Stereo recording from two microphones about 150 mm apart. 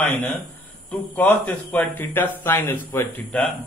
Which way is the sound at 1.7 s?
10° left (ahead or behind).